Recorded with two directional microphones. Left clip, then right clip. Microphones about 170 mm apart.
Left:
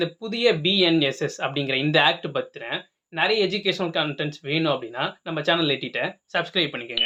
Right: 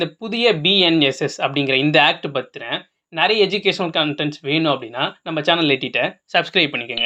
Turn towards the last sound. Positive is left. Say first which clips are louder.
# right 7 dB
turn(degrees=-30)  # may be behind; listen again after turning